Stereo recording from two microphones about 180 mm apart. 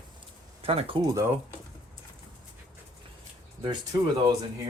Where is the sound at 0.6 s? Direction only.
30° right (ahead or behind).